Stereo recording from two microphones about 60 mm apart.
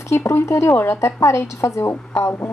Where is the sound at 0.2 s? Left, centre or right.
Left.